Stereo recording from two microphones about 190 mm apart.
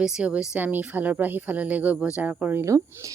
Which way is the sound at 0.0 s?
5° right (ahead or behind).